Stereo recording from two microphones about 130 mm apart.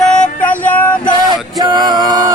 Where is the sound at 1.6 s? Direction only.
35° right (ahead or behind).